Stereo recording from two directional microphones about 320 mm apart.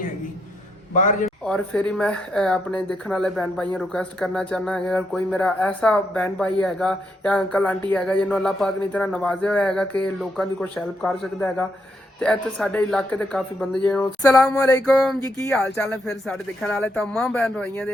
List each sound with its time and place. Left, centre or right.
0.9 s a man's voice: left
1.5 s speech: centre